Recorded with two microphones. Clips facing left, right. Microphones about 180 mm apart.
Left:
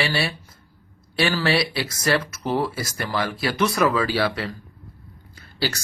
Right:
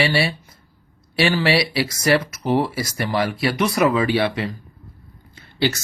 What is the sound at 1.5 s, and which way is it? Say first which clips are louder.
Speech: right 3 dB; 30° right (ahead or behind).